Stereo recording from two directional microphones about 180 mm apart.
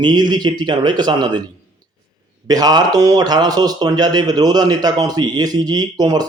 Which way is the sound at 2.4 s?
20° right (ahead or behind).